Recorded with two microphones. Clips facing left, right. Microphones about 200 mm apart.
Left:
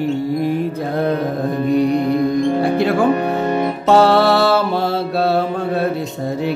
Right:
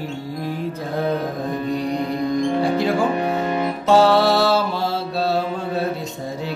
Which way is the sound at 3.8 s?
60° left (ahead or behind).